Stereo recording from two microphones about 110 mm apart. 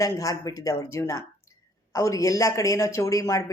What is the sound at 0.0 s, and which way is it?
Speech, 30° left (ahead or behind).